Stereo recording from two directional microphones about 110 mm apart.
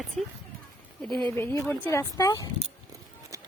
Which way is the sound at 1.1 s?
45° right (ahead or behind).